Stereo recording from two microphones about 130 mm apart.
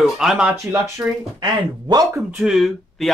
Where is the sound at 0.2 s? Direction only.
5° right (ahead or behind).